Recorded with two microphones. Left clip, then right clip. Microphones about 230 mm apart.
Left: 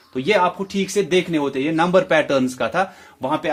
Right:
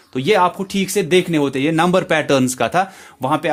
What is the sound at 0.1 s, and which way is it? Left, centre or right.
Speech, right.